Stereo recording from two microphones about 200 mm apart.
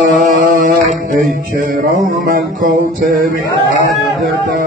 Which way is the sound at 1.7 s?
45° right (ahead or behind).